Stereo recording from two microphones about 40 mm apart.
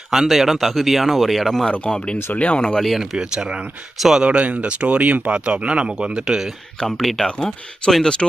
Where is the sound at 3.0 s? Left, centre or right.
Centre.